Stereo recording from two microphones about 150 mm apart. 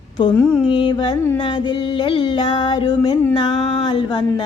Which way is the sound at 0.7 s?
30° left (ahead or behind).